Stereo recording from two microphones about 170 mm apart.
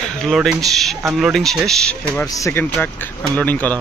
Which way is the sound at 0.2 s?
Centre (ahead or behind).